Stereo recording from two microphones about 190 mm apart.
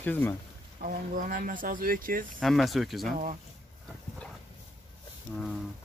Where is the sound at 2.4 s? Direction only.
Centre (ahead or behind).